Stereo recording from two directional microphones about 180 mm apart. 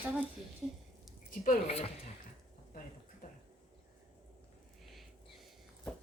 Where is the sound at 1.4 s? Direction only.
40° left (ahead or behind).